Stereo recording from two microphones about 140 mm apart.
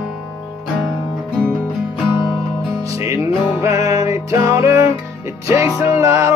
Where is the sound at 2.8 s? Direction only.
20° right (ahead or behind).